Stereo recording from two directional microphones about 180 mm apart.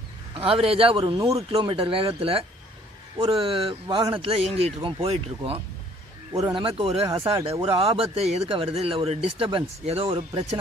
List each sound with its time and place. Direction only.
0.3 s speech: 30° right (ahead or behind)